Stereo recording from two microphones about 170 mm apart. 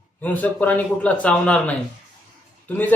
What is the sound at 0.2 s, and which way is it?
A man's voice, 10° left (ahead or behind).